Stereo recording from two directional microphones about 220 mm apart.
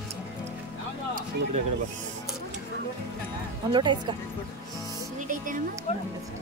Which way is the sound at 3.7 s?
20° right (ahead or behind).